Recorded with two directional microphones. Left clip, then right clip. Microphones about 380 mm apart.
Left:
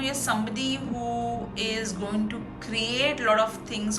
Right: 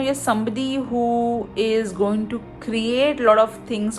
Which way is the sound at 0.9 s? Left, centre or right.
Right.